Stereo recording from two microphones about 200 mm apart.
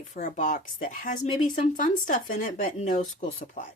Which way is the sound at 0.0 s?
40° left (ahead or behind).